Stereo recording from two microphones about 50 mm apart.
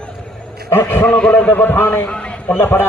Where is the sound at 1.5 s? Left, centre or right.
Left.